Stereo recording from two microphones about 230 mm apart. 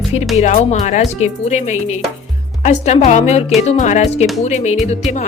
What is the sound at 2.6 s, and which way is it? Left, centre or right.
A woman's voice, left.